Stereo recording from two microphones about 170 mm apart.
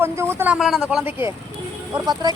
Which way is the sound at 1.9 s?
25° right (ahead or behind).